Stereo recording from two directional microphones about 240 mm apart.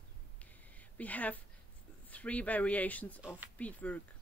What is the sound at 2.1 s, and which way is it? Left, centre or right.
Speech, centre.